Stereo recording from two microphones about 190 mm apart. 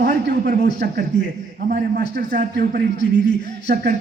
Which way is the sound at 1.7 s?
45° right (ahead or behind).